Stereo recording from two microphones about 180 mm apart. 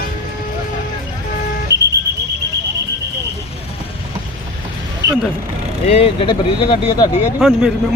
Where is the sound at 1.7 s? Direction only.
70° right (ahead or behind).